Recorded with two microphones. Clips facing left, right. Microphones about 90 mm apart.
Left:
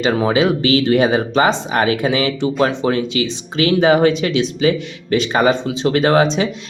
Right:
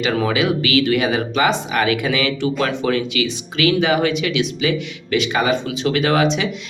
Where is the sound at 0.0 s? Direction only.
30° left (ahead or behind).